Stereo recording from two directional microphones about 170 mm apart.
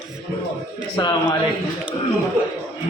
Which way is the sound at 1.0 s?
25° left (ahead or behind).